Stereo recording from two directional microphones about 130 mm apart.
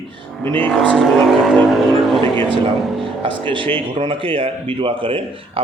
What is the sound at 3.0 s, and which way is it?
Speech, 40° right (ahead or behind).